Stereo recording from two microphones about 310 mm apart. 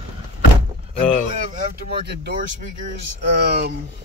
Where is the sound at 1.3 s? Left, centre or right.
Right.